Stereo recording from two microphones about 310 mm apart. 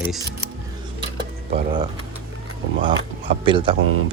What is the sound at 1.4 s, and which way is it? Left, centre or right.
Speech, centre.